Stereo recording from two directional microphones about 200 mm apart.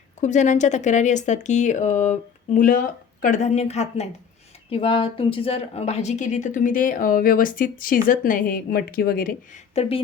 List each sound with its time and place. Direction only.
0.2 s a woman's voice: 35° left (ahead or behind)